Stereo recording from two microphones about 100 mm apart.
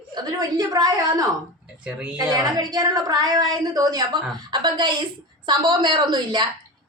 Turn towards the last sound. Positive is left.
turn(degrees=-50)  # may be behind; listen again after turning